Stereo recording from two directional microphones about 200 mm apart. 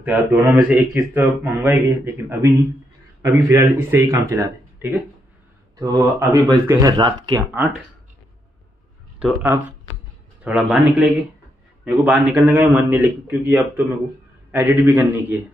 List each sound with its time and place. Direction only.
0.0 s a man's voice: 10° right (ahead or behind)
5.8 s a man's voice: 20° right (ahead or behind)
9.2 s a man's voice: 10° right (ahead or behind)